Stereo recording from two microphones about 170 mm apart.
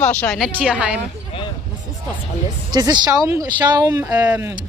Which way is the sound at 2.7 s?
25° right (ahead or behind).